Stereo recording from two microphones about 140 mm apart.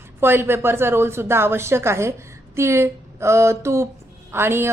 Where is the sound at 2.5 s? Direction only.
20° right (ahead or behind).